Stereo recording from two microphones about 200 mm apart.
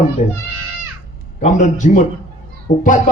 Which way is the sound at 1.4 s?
40° left (ahead or behind).